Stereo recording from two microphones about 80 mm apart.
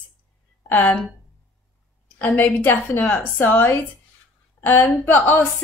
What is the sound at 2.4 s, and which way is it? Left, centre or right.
A woman's voice, left.